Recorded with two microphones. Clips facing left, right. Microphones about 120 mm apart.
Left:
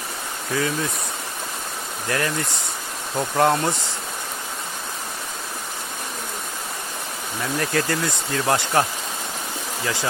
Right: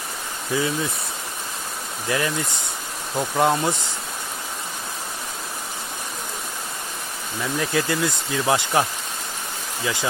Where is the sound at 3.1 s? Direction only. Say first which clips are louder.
Left 1 dB; centre (ahead or behind).